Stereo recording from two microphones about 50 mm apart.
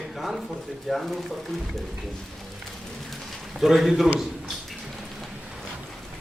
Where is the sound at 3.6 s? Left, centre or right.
Centre.